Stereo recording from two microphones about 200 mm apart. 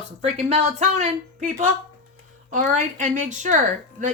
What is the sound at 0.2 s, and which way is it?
A woman's voice, 35° right (ahead or behind).